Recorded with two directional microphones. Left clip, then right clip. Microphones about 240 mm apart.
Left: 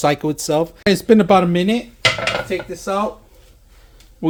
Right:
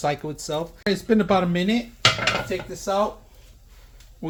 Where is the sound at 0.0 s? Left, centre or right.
Left.